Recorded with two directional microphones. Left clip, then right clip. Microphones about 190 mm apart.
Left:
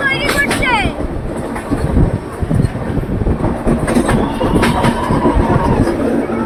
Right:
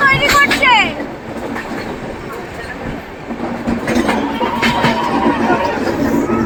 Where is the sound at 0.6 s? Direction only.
50° right (ahead or behind).